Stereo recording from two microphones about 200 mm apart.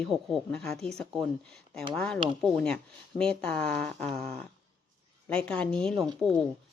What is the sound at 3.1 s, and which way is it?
Speech, 30° left (ahead or behind).